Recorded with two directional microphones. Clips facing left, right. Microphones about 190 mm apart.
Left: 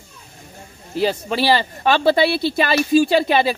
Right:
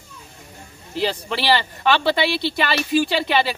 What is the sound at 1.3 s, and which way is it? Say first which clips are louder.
Speech: left 2 dB; 40° left (ahead or behind).